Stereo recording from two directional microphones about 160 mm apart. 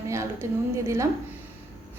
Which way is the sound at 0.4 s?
15° right (ahead or behind).